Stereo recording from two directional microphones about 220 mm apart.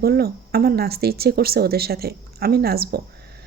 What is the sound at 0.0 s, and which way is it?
A woman's voice, 45° right (ahead or behind).